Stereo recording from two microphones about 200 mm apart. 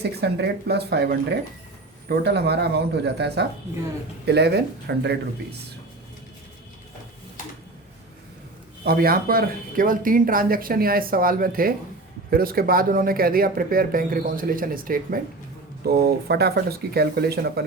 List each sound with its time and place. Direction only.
0.0 s speech: 55° right (ahead or behind)
8.8 s speech: 50° right (ahead or behind)